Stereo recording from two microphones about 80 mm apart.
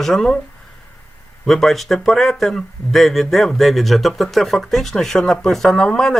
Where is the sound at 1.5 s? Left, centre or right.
Centre.